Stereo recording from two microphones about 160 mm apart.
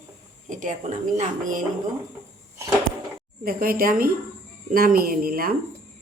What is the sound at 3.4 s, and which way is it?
A woman's voice, 65° right (ahead or behind).